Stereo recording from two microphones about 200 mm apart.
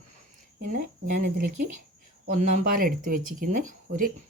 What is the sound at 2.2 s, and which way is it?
Speech, 40° right (ahead or behind).